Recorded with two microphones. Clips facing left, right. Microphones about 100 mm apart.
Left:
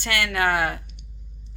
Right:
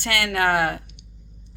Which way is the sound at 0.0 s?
55° right (ahead or behind).